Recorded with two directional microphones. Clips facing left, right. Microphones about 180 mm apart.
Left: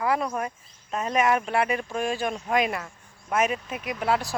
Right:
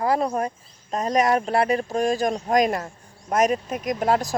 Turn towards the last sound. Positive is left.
turn(degrees=-40)  # may be behind; listen again after turning